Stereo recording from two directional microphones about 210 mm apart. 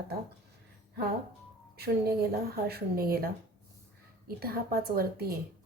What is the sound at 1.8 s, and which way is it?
A woman's voice, 45° right (ahead or behind).